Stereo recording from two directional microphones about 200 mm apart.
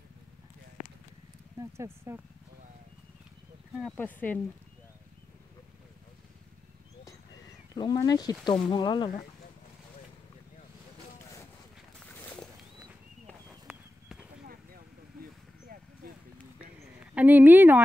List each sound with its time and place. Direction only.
1.6 s speech: 15° right (ahead or behind)
3.8 s speech: 10° left (ahead or behind)
7.7 s speech: 20° left (ahead or behind)
12.1 s a sound: 10° left (ahead or behind)
13.3 s a sound: 5° right (ahead or behind)
17.0 s speech: 5° right (ahead or behind)